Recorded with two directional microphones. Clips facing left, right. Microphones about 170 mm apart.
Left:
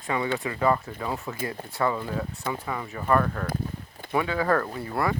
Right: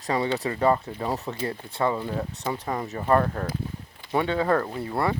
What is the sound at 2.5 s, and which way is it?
Speech, 35° right (ahead or behind).